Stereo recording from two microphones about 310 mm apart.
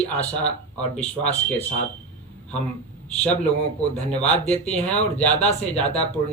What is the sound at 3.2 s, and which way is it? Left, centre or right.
Speech, centre.